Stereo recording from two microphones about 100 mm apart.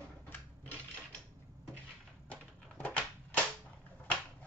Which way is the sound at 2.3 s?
15° left (ahead or behind).